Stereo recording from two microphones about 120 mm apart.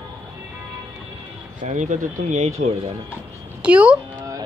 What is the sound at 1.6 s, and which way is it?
Speech, 90° right.